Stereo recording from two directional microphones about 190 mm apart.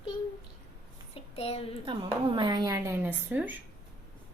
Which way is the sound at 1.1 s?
30° left (ahead or behind).